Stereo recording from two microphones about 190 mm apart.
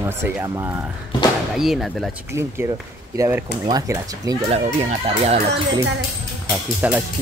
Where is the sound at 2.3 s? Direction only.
15° right (ahead or behind).